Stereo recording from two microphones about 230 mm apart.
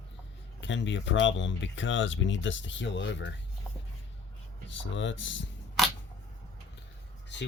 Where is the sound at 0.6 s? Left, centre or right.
Left.